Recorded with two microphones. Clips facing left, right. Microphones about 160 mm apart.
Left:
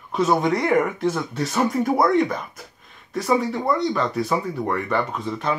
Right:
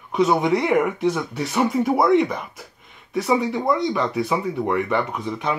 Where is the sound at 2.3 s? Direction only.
15° right (ahead or behind).